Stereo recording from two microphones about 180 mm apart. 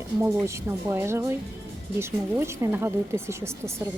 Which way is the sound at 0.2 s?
15° right (ahead or behind).